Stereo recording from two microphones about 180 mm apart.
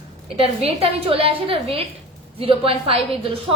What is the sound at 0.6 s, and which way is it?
A woman's voice, 35° right (ahead or behind).